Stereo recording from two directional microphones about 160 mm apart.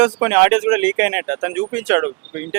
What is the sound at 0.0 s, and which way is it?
Speech, 10° right (ahead or behind).